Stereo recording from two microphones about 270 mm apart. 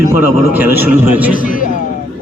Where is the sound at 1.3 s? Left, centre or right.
Left.